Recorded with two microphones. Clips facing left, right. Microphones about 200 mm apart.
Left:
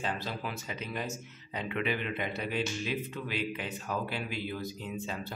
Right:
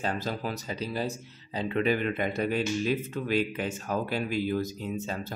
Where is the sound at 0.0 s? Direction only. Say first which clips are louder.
Right 4 dB; 45° right (ahead or behind).